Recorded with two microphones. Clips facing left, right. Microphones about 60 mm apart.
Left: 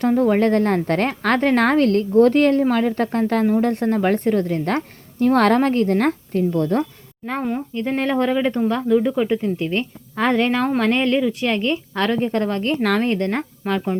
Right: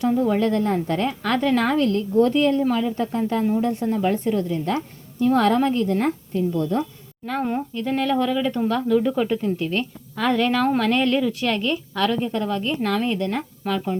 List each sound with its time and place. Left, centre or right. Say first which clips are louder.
0.0 s a woman's voice: left 3 dB; left
7.8 s a woman's voice: left 2 dB; left
8.6 s a woman's voice: even; centre; by 13.0 s left
13.0 s a woman's voice: left 3 dB; left